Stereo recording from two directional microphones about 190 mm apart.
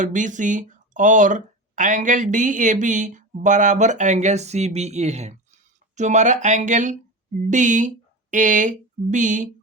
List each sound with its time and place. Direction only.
0.0 s speech: 40° right (ahead or behind)